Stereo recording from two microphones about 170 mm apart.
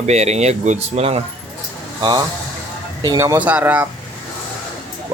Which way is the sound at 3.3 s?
10° right (ahead or behind).